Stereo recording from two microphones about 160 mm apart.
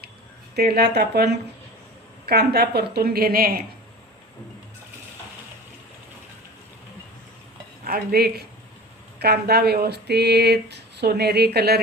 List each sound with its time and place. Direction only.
0.5 s a woman's voice: 80° right; by 3.6 s 65° right (ahead or behind)
7.9 s a woman's voice: 70° right (ahead or behind); by 11.8 s 85° right